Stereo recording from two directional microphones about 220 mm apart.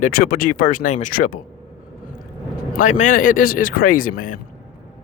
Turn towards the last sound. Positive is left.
turn(degrees=40)  # may be behind; listen again after turning